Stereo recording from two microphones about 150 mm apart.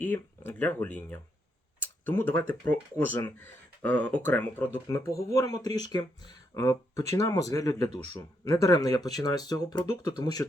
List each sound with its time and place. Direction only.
0.0 s speech: 15° left (ahead or behind)
5.3 s speech: 25° left (ahead or behind)